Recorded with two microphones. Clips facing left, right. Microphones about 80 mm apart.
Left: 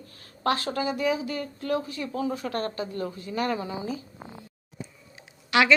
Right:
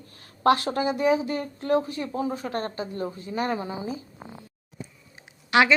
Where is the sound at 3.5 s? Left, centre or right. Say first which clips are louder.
Right 1 dB; right.